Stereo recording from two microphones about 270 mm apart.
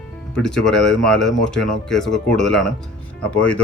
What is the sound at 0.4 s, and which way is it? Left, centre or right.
A man's voice, centre.